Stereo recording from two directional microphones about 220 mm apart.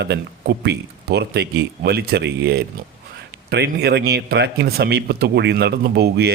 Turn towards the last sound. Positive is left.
turn(degrees=-50)  # may be behind; listen again after turning